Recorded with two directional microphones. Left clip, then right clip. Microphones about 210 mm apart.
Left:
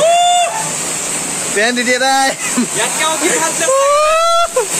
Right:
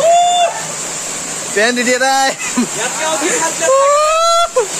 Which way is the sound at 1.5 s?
20° right (ahead or behind).